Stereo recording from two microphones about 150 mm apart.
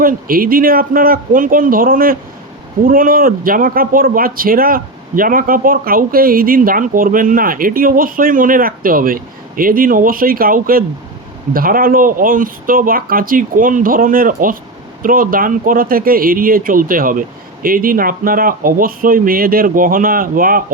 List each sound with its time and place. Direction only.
0.0 s speech: 75° right (ahead or behind)